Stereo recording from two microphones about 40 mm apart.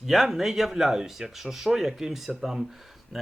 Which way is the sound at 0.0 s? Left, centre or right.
Centre.